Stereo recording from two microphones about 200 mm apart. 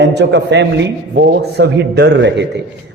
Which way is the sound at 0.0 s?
60° right (ahead or behind).